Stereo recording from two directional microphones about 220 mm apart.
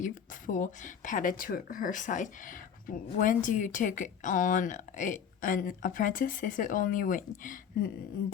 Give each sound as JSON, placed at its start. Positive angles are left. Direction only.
{"t": 0.0, "sound": "speech", "side_deg": 35}